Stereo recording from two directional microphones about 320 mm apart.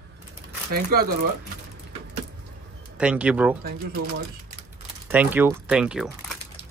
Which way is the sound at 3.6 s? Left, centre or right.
Right.